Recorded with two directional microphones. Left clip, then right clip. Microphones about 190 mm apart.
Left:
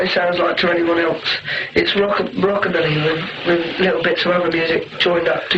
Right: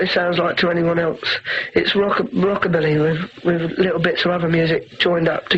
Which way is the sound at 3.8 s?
40° right (ahead or behind).